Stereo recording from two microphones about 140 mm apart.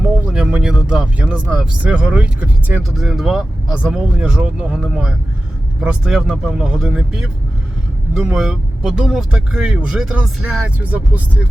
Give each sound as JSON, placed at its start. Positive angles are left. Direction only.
{"t": 0.0, "sound": "speech", "side_deg": -5}